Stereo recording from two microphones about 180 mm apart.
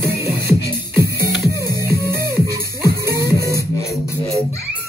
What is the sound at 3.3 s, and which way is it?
Music, 20° left (ahead or behind).